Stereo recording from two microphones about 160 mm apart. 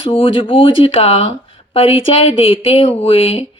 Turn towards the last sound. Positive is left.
turn(degrees=35)  # may be behind; listen again after turning